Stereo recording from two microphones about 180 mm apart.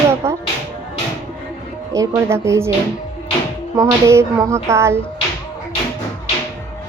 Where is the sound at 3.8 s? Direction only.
15° right (ahead or behind).